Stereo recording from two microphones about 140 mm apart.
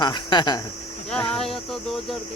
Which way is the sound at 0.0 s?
35° left (ahead or behind).